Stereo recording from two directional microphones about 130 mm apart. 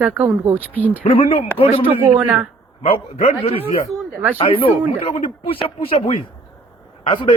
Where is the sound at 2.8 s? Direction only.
50° left (ahead or behind).